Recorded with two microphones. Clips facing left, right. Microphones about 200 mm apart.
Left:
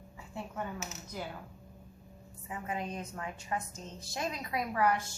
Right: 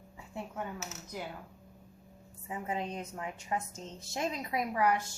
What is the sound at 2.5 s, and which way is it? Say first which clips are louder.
A woman's voice: right 1 dB; 25° right (ahead or behind).